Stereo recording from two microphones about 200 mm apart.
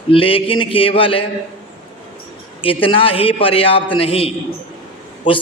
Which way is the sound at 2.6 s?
25° left (ahead or behind).